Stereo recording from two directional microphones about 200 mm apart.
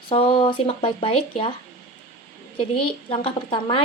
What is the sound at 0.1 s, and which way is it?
Speech, 25° left (ahead or behind).